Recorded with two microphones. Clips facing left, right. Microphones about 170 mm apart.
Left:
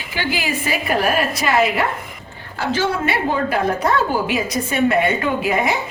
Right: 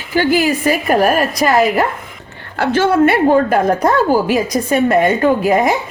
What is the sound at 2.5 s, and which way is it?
A woman's voice, 60° right (ahead or behind).